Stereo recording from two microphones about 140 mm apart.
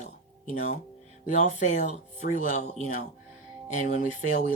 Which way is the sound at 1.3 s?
60° left (ahead or behind).